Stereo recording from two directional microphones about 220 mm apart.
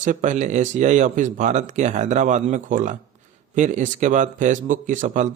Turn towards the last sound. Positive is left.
turn(degrees=-35)  # may be behind; listen again after turning